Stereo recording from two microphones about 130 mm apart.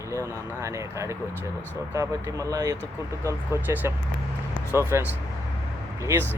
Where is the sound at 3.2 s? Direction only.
15° right (ahead or behind).